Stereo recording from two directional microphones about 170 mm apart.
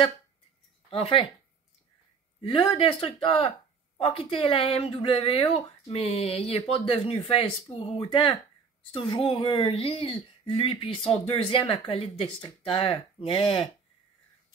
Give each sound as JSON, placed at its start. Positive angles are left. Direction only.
{"t": 0.8, "sound": "speech", "side_deg": 35}
{"t": 2.4, "sound": "speech", "side_deg": 30}